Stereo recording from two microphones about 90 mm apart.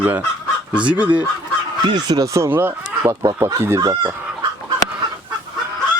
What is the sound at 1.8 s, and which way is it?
Speech, 50° right (ahead or behind).